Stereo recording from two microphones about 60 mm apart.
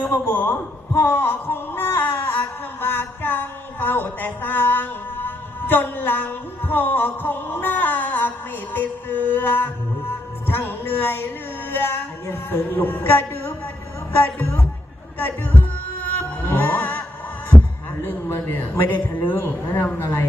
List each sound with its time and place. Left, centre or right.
0.0 s speech: left
8.7 s music: left
10.7 s speech: left
11.7 s music: left
16.0 s music: left
18.8 s music: left
20.0 s a woman's voice: left